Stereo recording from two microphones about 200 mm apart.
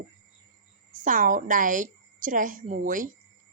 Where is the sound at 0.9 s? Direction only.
40° right (ahead or behind).